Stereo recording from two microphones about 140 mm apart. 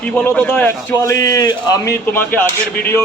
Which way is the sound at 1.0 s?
20° left (ahead or behind).